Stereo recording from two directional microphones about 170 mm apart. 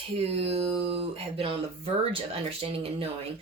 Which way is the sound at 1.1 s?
35° right (ahead or behind).